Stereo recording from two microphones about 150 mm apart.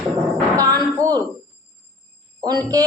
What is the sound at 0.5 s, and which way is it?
Speech, 25° right (ahead or behind).